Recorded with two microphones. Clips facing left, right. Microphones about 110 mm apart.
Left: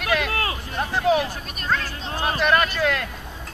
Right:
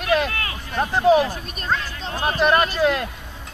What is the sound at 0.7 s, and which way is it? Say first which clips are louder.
Speech: right 5 dB; 30° right (ahead or behind).